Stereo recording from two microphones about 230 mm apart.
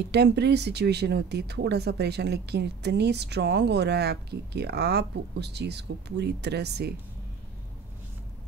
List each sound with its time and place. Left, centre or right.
0.1 s speech: right